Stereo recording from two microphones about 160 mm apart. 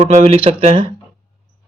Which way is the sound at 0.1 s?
45° right (ahead or behind).